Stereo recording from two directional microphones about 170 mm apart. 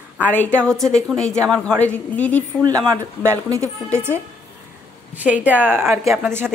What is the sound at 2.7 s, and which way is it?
Speech, 20° right (ahead or behind).